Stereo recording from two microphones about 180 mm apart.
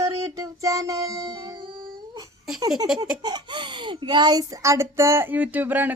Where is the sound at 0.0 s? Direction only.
20° right (ahead or behind).